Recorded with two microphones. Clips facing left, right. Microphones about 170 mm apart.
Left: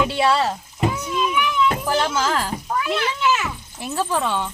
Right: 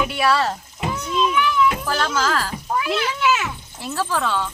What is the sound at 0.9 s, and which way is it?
A child's voice, 10° left (ahead or behind).